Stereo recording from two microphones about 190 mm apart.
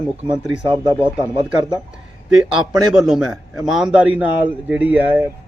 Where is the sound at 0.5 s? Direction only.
25° right (ahead or behind).